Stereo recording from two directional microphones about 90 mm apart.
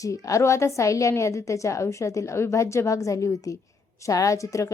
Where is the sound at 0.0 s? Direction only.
40° left (ahead or behind).